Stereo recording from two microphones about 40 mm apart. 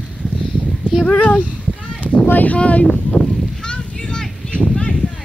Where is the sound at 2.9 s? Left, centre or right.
Centre.